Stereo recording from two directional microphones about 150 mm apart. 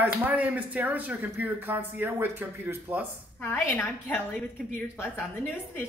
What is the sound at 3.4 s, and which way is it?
Speech, 15° left (ahead or behind).